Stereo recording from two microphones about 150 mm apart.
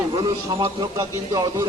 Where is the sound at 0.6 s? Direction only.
25° right (ahead or behind).